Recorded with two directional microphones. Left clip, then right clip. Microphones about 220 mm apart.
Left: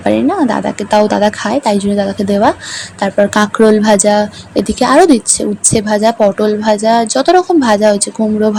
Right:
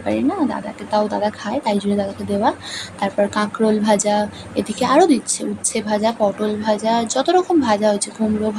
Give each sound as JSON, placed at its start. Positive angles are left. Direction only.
{"t": 0.0, "sound": "speech", "side_deg": 30}